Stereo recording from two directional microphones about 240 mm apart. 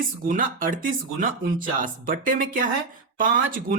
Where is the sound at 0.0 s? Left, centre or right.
Right.